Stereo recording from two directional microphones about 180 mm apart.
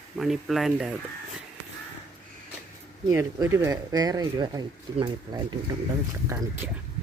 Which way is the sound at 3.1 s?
15° right (ahead or behind).